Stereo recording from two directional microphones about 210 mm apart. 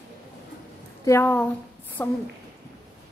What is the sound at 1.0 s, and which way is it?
A woman's voice, 10° left (ahead or behind).